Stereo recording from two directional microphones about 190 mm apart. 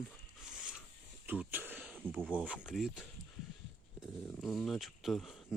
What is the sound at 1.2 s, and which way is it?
Throat clearing, 10° right (ahead or behind).